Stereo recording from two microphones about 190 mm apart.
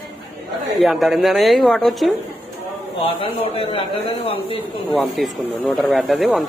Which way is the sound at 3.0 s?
30° left (ahead or behind).